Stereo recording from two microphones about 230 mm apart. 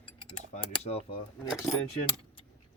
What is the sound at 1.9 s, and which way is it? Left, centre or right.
Keys jangling, left.